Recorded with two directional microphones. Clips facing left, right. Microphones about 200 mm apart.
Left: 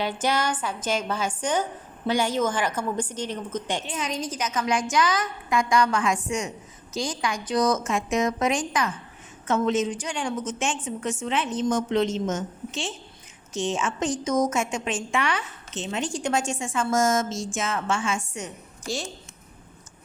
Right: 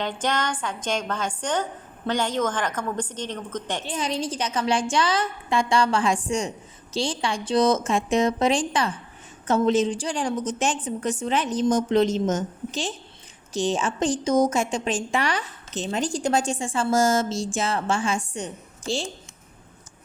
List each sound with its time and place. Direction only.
0.0 s a woman's voice: 10° left (ahead or behind)
3.8 s a woman's voice: 30° right (ahead or behind)